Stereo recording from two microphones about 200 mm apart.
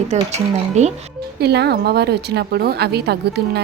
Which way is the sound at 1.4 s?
55° right (ahead or behind).